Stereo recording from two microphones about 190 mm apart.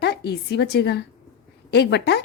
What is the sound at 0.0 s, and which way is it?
A woman's voice, 60° left (ahead or behind).